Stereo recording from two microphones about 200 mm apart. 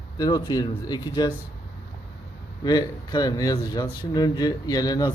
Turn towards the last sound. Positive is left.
turn(degrees=20)  # may be behind; listen again after turning